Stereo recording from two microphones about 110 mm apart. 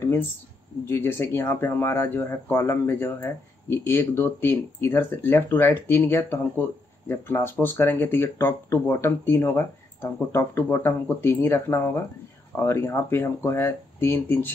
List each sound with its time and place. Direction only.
0.8 s speech: 20° left (ahead or behind)